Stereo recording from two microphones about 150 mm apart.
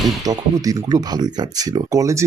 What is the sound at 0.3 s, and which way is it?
Speech, 25° right (ahead or behind).